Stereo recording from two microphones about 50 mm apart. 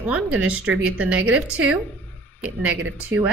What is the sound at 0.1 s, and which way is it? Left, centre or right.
A woman's voice, right.